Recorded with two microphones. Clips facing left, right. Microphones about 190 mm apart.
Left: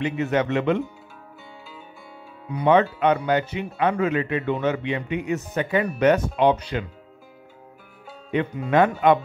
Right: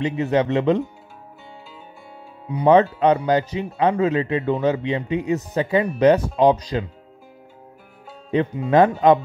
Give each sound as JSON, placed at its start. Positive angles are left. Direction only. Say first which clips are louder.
{"t": 0.0, "sound": "speech", "louder": "right 3 dB", "side_deg": -30}
{"t": 2.5, "sound": "speech", "louder": "right 3 dB", "side_deg": -35}
{"t": 8.3, "sound": "speech", "louder": "right 3 dB", "side_deg": -30}